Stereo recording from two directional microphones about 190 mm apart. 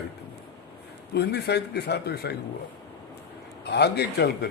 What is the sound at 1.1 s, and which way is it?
A man's voice, 60° left (ahead or behind).